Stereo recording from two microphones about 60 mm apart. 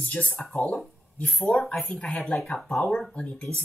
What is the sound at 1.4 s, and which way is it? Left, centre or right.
Speech, left.